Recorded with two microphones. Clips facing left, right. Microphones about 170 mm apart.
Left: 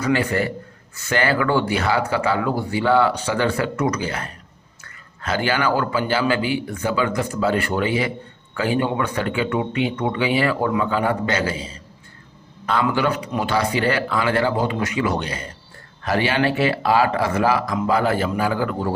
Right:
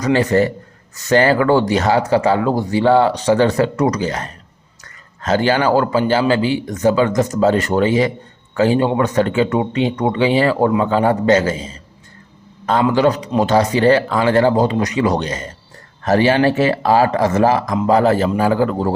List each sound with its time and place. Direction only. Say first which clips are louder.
0.0 s a man's voice: right 6 dB; 40° right (ahead or behind)
12.9 s speech: right 6 dB; 40° right (ahead or behind)